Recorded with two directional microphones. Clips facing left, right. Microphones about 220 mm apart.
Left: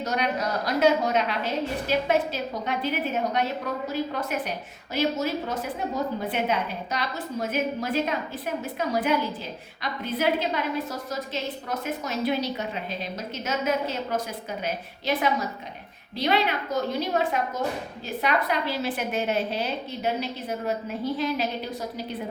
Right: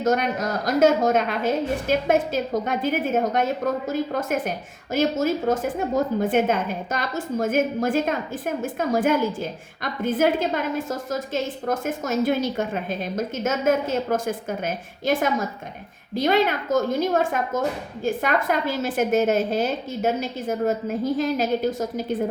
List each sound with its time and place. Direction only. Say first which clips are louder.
0.0 s a woman's voice: right 5 dB; 45° right (ahead or behind)